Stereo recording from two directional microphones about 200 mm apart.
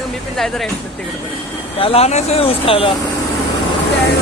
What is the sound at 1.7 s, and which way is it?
Speech, 30° left (ahead or behind).